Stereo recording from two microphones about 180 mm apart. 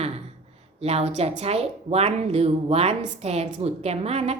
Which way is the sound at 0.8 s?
35° right (ahead or behind).